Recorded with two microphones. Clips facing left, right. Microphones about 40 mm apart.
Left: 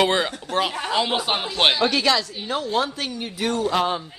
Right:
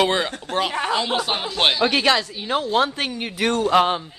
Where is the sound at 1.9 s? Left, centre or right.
Right.